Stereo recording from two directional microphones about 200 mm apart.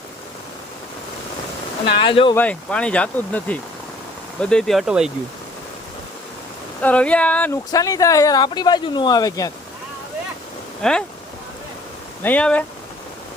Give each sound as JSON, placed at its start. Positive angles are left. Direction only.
{"t": 2.0, "sound": "speech", "side_deg": 25}
{"t": 2.3, "sound": "speech", "side_deg": 5}
{"t": 6.8, "sound": "speech", "side_deg": 5}
{"t": 10.8, "sound": "speech", "side_deg": 5}
{"t": 12.2, "sound": "speech", "side_deg": 5}